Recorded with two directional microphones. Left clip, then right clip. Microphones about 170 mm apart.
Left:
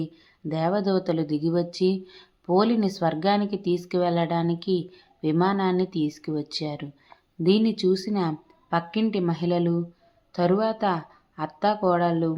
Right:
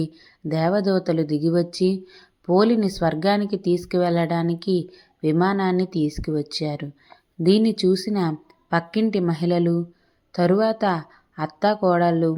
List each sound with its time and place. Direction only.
0.0 s a woman's voice: 25° right (ahead or behind)